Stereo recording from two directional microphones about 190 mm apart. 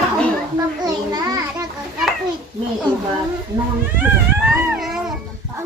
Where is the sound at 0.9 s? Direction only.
20° right (ahead or behind).